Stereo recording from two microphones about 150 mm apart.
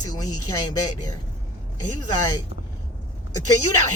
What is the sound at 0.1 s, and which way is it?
Speech, 25° left (ahead or behind).